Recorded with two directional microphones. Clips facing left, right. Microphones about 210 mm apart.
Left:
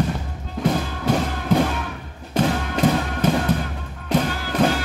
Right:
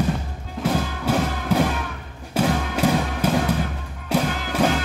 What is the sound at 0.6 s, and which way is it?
Music, 5° right (ahead or behind).